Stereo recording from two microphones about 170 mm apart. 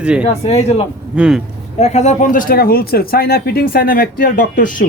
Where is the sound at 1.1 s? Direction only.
5° right (ahead or behind).